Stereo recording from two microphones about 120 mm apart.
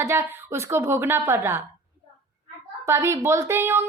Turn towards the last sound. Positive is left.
turn(degrees=-20)  # may be behind; listen again after turning